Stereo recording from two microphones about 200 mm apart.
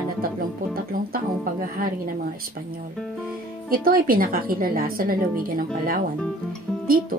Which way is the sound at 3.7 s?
45° right (ahead or behind).